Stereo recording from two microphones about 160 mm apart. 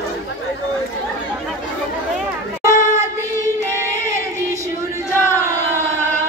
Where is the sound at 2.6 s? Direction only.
20° right (ahead or behind).